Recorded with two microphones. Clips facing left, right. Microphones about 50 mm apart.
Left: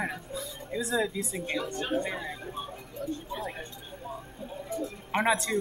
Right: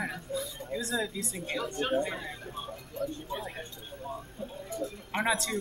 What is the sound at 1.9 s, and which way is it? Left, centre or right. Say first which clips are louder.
Speech: even; centre.